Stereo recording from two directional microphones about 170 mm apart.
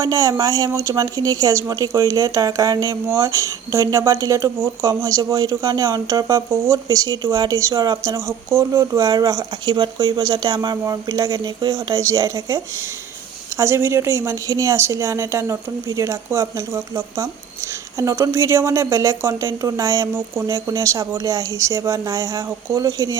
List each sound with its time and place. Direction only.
0.0 s a woman's voice: 20° right (ahead or behind)